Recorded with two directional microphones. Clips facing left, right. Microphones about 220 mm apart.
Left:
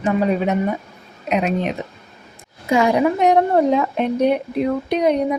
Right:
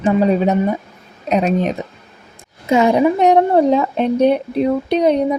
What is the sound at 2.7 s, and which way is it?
Speech, 25° right (ahead or behind).